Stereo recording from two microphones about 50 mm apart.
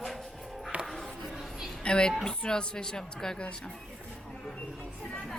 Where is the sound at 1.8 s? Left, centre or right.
Centre.